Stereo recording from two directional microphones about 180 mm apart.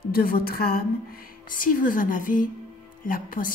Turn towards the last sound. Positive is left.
turn(degrees=50)  # may be behind; listen again after turning